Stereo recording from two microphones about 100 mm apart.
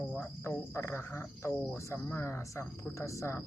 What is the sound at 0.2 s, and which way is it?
Speech, 20° left (ahead or behind).